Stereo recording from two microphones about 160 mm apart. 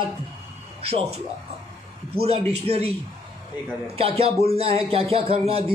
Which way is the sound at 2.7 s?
40° right (ahead or behind).